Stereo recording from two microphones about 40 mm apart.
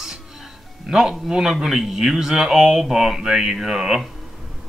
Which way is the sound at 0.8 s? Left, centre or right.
Centre.